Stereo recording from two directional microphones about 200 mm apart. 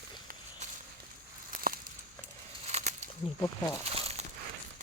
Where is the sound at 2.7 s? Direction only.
30° right (ahead or behind).